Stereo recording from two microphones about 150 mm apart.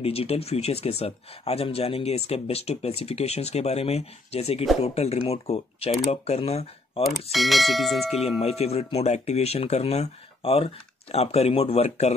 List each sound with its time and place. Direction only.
0.0 s speech: 40° left (ahead or behind)
7.2 s speech: centre (ahead or behind)
8.4 s speech: 45° left (ahead or behind)